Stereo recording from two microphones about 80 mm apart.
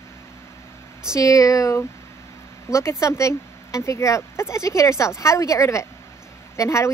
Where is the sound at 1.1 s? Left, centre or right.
Left.